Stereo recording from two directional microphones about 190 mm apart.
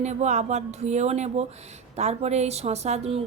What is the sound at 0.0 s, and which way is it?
A woman's voice, 35° right (ahead or behind).